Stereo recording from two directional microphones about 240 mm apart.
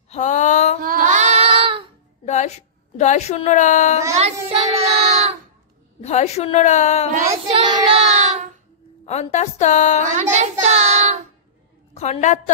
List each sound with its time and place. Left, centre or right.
0.1 s a sound: left
0.8 s child singing: right
2.2 s a woman's voice: left
4.1 s child singing: right
5.9 s a woman's voice: left
7.4 s child singing: right
9.0 s a woman's voice: left
10.3 s child singing: right
11.9 s a woman's voice: left